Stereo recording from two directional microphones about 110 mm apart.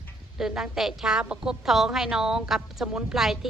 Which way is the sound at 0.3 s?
5° right (ahead or behind).